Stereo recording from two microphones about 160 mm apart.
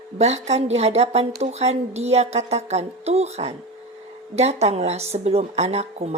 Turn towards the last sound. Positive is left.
turn(degrees=-45)  # may be behind; listen again after turning